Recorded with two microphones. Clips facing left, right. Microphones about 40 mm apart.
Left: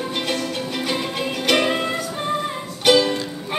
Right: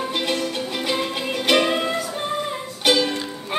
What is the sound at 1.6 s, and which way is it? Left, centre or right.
Music, centre.